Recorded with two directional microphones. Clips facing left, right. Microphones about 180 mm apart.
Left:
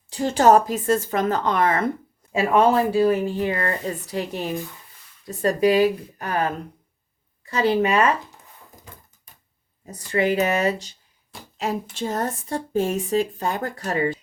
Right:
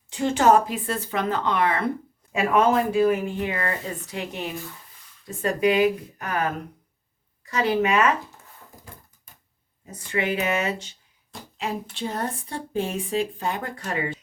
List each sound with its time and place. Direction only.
0.1 s speech: 35° left (ahead or behind)
2.3 s speech: 30° left (ahead or behind)
9.8 s speech: 40° left (ahead or behind)